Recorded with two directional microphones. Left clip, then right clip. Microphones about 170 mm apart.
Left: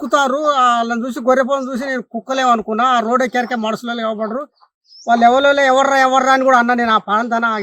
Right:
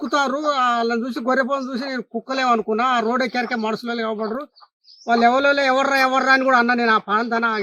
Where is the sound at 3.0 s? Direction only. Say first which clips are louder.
Left 5 dB; 20° left (ahead or behind).